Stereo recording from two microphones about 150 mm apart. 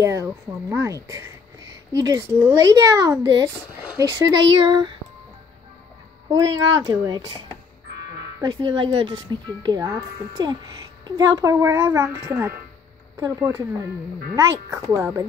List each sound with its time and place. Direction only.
0.0 s speech: 20° right (ahead or behind)
4.5 s speech: 30° right (ahead or behind)
6.3 s speech: 25° right (ahead or behind)